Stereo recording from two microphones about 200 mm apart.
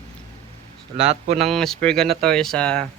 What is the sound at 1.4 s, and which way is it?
A man's voice, centre (ahead or behind).